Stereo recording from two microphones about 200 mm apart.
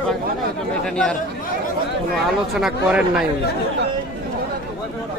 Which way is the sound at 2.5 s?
5° right (ahead or behind).